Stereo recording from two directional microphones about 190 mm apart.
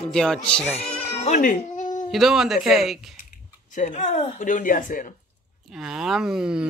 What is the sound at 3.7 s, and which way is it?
Speech, 40° left (ahead or behind).